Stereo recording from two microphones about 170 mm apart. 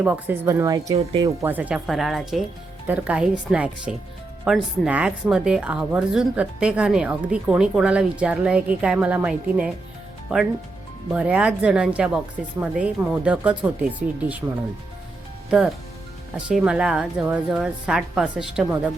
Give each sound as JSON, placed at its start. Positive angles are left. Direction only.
{"t": 0.0, "sound": "a woman's voice", "side_deg": -10}
{"t": 11.1, "sound": "a woman's voice", "side_deg": -10}
{"t": 15.4, "sound": "a woman's voice", "side_deg": -5}